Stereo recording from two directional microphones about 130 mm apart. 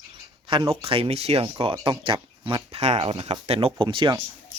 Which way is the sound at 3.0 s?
50° right (ahead or behind).